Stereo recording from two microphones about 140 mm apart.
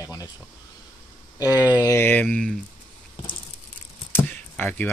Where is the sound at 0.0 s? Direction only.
25° left (ahead or behind).